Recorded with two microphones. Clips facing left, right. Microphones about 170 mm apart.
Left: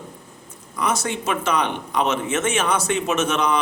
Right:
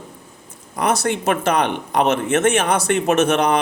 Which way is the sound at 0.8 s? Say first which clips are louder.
Right 4 dB; 65° right (ahead or behind).